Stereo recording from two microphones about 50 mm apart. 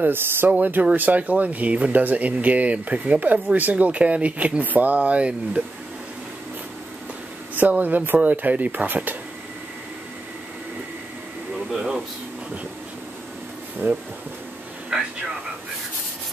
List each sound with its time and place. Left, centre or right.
0.0 s speech: right
0.5 s speech: right
7.5 s speech: right
11.7 s a sound: centre
13.8 s speech: right
14.9 s a sound: centre